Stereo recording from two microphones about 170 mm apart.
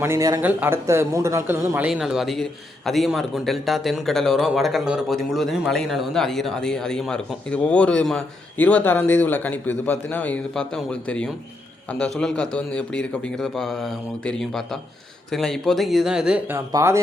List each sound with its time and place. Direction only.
0.0 s speech: 15° right (ahead or behind)
16.7 s speech: 15° right (ahead or behind)